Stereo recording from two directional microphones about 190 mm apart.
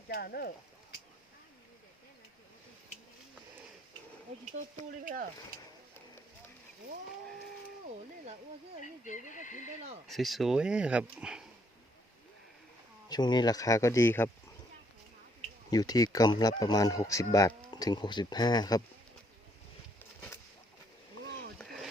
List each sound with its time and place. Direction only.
0.1 s speech: 55° left (ahead or behind)
5.0 s speech: 50° right (ahead or behind)
9.2 s speech: 40° left (ahead or behind)
10.1 s speech: centre (ahead or behind)
13.1 s speech: 20° left (ahead or behind)
15.7 s speech: 20° left (ahead or behind)
21.6 s a sound: centre (ahead or behind)